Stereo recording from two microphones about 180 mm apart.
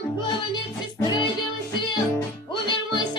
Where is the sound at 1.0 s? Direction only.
25° left (ahead or behind).